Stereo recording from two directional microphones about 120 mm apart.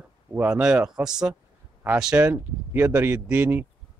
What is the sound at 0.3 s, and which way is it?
Speech, 10° right (ahead or behind).